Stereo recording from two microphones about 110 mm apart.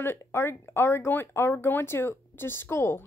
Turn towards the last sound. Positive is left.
turn(degrees=25)  # may be behind; listen again after turning